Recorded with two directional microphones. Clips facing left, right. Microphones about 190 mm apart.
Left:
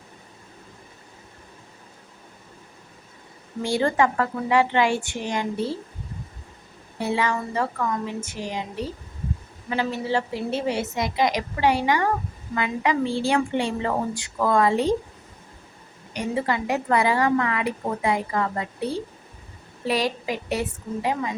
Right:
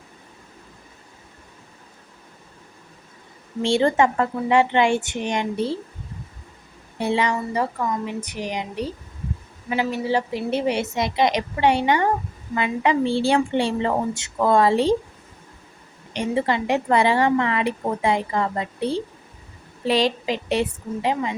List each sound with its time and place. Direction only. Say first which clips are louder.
3.6 s a woman's voice: right 3 dB; 25° right (ahead or behind)
7.0 s a woman's voice: right 2 dB; 20° right (ahead or behind)
16.1 s a woman's voice: right 3 dB; 25° right (ahead or behind)